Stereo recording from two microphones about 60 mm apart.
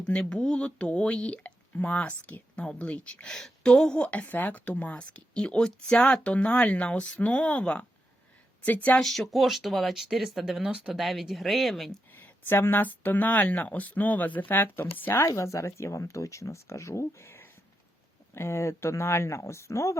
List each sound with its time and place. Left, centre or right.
0.0 s a woman's voice: centre
9.0 s speech: centre
12.1 s speech: left
15.2 s speech: left